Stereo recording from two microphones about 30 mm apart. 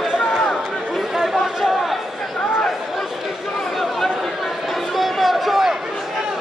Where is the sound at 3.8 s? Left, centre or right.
Centre.